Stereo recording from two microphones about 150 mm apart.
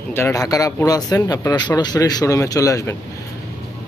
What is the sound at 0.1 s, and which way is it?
Speech, 15° left (ahead or behind).